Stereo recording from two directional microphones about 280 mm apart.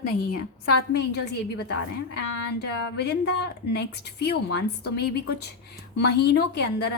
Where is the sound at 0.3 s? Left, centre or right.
Left.